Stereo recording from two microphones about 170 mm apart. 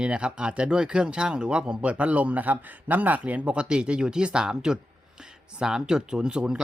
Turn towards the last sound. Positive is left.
turn(degrees=-5)  # may be behind; listen again after turning